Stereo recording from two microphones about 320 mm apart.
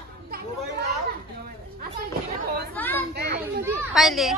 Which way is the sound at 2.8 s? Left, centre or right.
Centre.